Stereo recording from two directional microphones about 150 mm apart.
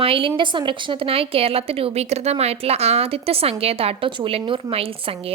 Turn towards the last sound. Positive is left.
turn(degrees=-40)  # may be behind; listen again after turning